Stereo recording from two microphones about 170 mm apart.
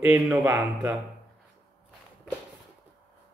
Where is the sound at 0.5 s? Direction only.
20° right (ahead or behind).